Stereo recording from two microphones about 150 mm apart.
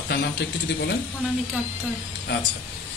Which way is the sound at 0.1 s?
90° left.